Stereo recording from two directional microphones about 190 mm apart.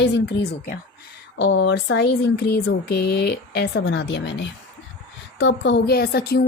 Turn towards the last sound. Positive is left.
turn(degrees=55)  # may be behind; listen again after turning